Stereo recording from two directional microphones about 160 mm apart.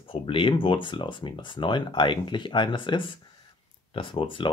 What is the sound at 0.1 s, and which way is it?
Speech, 35° left (ahead or behind).